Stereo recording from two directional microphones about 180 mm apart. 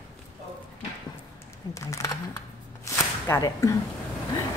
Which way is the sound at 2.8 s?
15° left (ahead or behind).